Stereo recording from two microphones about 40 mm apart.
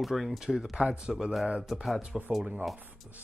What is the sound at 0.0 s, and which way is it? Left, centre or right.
A man's voice, centre.